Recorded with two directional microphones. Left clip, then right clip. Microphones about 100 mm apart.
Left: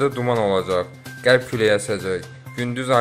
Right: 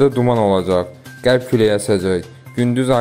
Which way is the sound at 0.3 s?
35° right (ahead or behind).